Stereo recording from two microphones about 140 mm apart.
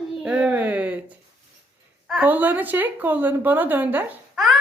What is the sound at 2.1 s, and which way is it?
Speech, 10° right (ahead or behind).